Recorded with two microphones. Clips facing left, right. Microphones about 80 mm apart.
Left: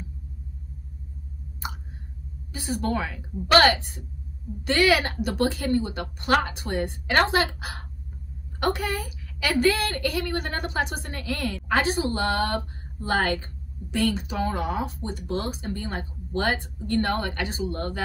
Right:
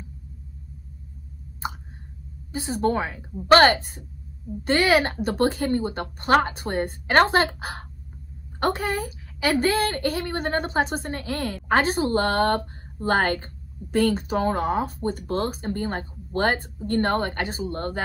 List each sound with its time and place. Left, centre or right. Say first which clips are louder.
2.5 s a woman's voice: right 4 dB; right